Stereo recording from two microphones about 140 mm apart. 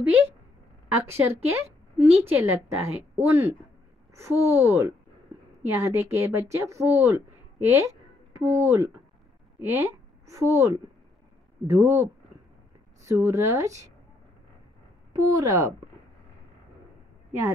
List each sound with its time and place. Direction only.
1.0 s a woman's voice: 15° right (ahead or behind)
15.2 s speech: 25° right (ahead or behind)